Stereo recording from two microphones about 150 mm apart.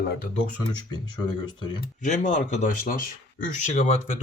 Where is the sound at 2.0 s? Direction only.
60° left (ahead or behind).